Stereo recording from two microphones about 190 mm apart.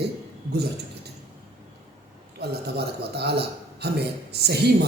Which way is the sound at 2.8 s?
60° right (ahead or behind).